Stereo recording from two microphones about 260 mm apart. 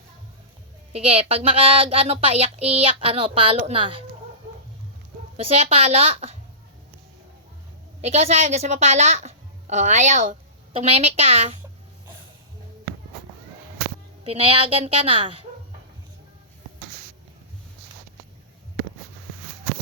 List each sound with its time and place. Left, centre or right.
0.9 s speech: right
5.4 s speech: right
8.0 s a woman's voice: right
14.3 s speech: right